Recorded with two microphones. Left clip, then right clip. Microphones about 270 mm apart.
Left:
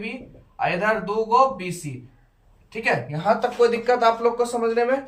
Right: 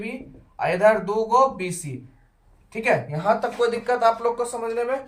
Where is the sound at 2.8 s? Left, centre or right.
Right.